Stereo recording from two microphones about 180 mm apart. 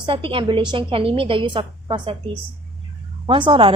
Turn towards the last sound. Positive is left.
turn(degrees=-30)  # may be behind; listen again after turning